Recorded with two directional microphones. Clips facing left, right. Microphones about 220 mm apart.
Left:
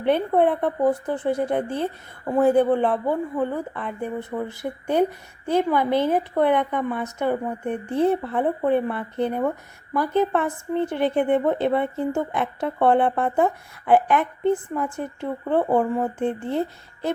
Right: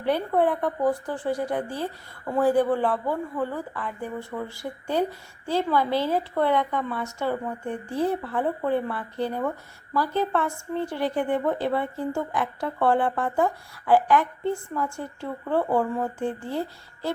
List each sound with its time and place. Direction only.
0.0 s speech: 20° left (ahead or behind)